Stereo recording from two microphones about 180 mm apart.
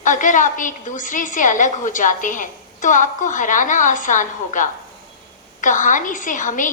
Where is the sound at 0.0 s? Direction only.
45° left (ahead or behind).